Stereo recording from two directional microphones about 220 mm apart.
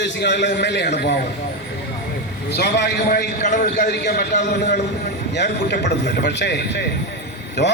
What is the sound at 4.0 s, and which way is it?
A man's voice, 50° left (ahead or behind).